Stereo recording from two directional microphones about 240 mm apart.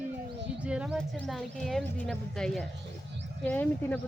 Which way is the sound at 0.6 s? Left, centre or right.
Centre.